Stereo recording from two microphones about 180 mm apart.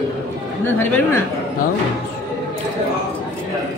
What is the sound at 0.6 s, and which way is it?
Speech, 10° left (ahead or behind).